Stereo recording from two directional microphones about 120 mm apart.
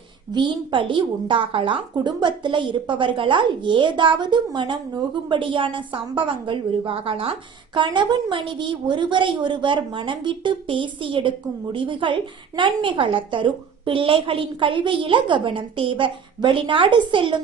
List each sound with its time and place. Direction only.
0.3 s a woman's voice: 40° right (ahead or behind)